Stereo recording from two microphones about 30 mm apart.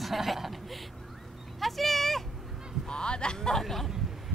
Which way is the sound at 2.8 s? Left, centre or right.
Left.